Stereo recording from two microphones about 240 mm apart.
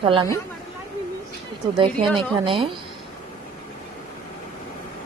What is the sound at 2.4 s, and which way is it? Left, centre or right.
Speech, right.